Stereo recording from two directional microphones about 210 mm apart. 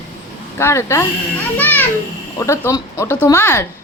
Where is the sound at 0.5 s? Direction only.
10° left (ahead or behind).